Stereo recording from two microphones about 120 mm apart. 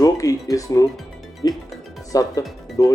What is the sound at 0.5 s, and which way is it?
Speech, 30° left (ahead or behind).